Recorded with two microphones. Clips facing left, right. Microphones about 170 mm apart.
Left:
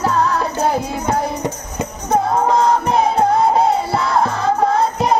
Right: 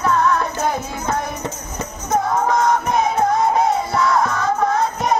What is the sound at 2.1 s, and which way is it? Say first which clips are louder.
Music: left 3 dB; 30° left (ahead or behind).